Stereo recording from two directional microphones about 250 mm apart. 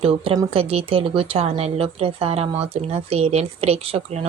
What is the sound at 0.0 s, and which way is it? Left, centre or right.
Speech, right.